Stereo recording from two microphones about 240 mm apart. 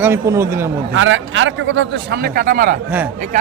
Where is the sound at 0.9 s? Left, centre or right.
Right.